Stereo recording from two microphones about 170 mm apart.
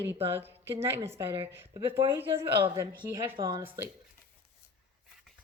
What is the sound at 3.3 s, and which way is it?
Speech, 30° right (ahead or behind).